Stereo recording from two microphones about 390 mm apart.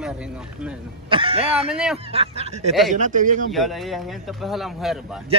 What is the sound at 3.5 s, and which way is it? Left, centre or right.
Speech, centre.